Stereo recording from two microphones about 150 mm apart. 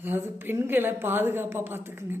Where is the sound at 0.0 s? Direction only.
15° right (ahead or behind).